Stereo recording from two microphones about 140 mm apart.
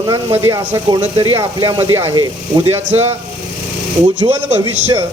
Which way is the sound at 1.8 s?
20° right (ahead or behind).